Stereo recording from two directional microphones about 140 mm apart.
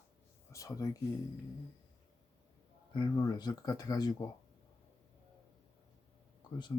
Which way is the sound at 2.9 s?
30° left (ahead or behind).